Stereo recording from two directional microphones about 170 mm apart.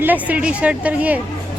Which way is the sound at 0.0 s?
10° right (ahead or behind).